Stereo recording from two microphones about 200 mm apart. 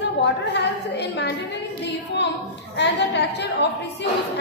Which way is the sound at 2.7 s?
60° left (ahead or behind).